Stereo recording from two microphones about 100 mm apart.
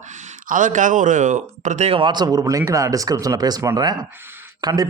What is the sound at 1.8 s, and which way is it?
Speech, 80° right.